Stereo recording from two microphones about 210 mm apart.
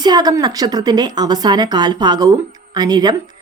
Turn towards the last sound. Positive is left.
turn(degrees=-20)  # may be behind; listen again after turning